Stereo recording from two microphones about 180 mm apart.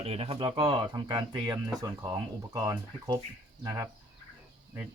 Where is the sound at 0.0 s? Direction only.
35° right (ahead or behind).